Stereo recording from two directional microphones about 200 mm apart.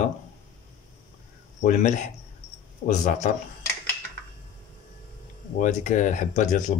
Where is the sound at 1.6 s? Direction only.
40° left (ahead or behind).